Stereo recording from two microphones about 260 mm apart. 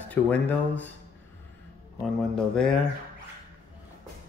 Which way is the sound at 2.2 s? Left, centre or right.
Centre.